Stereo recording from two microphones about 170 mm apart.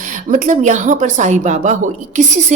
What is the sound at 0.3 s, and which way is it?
A woman's voice, 50° right (ahead or behind).